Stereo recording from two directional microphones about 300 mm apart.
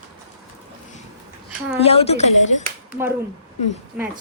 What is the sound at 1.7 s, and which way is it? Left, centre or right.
Speech, centre.